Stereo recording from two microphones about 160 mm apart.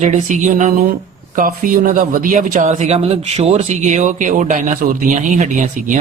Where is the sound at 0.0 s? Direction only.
50° right (ahead or behind).